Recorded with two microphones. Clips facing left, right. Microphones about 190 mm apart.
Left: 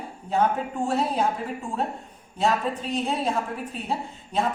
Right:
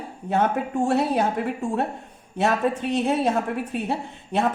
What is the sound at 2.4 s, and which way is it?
A woman's voice, 65° right (ahead or behind).